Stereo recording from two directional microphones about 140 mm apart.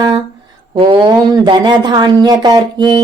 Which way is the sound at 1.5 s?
30° right (ahead or behind).